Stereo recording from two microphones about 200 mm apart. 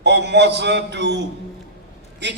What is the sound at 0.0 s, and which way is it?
A man's voice, 60° right (ahead or behind).